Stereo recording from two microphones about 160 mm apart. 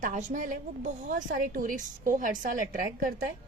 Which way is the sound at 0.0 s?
50° right (ahead or behind).